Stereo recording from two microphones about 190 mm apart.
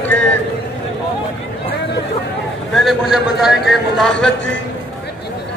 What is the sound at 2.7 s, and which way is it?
A man's voice, centre (ahead or behind).